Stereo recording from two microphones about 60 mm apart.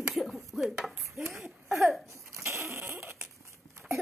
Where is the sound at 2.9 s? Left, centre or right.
Right.